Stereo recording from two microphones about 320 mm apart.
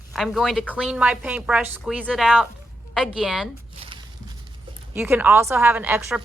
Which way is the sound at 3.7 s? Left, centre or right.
Centre.